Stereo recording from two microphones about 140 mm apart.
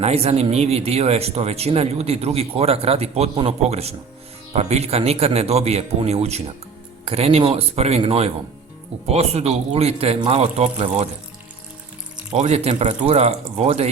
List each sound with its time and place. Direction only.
0.0 s speech: 45° right (ahead or behind)
12.3 s speech: 55° right (ahead or behind)